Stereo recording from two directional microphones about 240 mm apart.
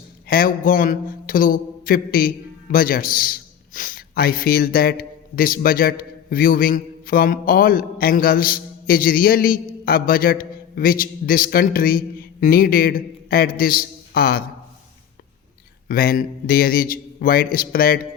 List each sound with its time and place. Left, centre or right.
0.3 s a man's voice: left
15.9 s a man's voice: left